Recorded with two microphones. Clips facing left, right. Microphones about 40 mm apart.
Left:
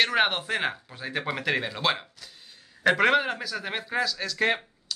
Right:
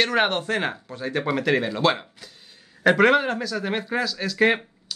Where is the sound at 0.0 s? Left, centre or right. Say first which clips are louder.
Right 2 dB; centre.